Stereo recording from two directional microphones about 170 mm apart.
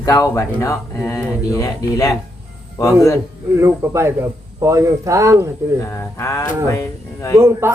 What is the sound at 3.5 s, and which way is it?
Speech, 15° right (ahead or behind).